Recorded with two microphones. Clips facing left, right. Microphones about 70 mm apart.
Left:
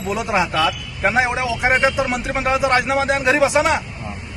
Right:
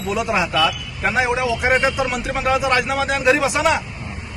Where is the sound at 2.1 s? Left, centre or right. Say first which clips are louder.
Even; left.